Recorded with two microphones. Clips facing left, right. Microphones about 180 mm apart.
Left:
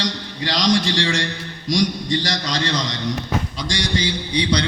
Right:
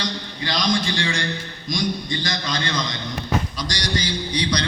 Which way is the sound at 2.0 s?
35° left (ahead or behind).